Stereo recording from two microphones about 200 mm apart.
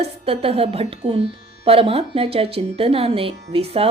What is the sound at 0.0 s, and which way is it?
Speech, 30° right (ahead or behind).